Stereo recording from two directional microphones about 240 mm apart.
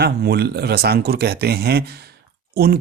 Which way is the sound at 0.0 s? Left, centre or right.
Right.